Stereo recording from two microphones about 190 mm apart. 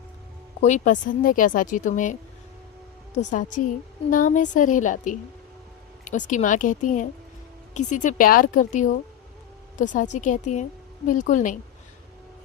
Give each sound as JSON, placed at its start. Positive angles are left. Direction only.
{"t": 0.6, "sound": "a woman's voice", "side_deg": 40}
{"t": 3.6, "sound": "a woman's voice", "side_deg": 45}